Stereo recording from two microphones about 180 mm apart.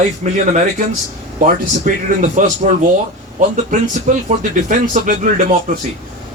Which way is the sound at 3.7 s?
45° right (ahead or behind).